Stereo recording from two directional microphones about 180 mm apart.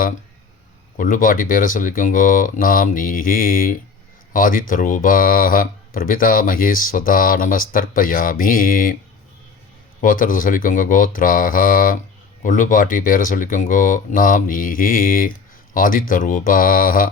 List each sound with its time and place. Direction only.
0.9 s speech: 50° left (ahead or behind)
10.0 s speech: 50° left (ahead or behind)